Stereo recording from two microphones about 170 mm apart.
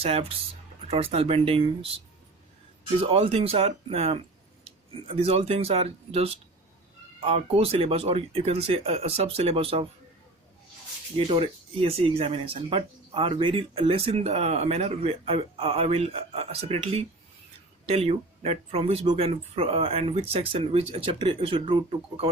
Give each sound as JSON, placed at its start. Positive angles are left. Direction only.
{"t": 0.0, "sound": "speech", "side_deg": -35}
{"t": 3.0, "sound": "speech", "side_deg": -35}
{"t": 11.3, "sound": "speech", "side_deg": -35}